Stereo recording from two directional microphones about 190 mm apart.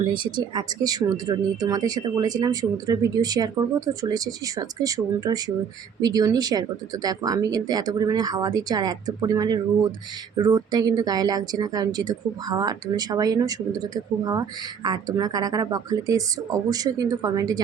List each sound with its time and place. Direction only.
0.0 s speech: 25° right (ahead or behind)